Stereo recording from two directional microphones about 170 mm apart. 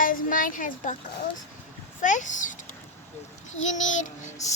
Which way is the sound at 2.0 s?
50° left (ahead or behind).